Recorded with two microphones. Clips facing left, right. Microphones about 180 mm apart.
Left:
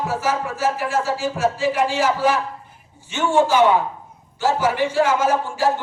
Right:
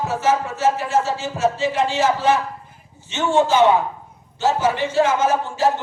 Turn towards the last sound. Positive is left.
turn(degrees=-20)  # may be behind; listen again after turning